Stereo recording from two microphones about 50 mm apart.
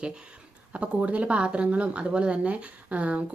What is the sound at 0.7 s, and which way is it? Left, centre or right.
A woman's voice, right.